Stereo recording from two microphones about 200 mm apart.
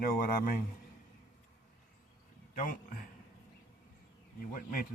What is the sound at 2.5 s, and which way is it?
Speech, 40° left (ahead or behind).